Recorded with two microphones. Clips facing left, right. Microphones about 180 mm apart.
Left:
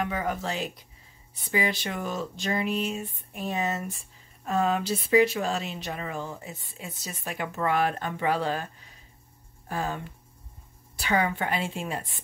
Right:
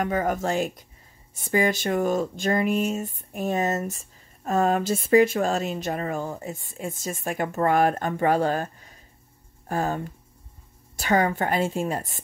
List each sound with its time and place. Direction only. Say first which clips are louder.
0.0 s speech: right 5 dB; 45° right (ahead or behind)